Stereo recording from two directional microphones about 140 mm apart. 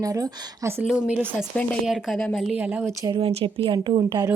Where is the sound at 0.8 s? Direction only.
10° right (ahead or behind).